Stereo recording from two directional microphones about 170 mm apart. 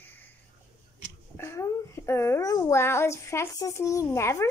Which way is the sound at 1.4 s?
15° left (ahead or behind).